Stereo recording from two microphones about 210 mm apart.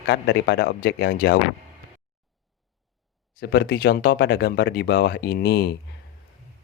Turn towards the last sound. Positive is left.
turn(degrees=50)  # may be behind; listen again after turning